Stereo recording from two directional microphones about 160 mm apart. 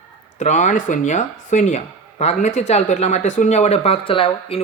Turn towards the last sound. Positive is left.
turn(degrees=35)  # may be behind; listen again after turning